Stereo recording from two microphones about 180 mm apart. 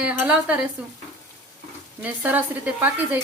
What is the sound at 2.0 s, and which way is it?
A woman's voice, 10° right (ahead or behind).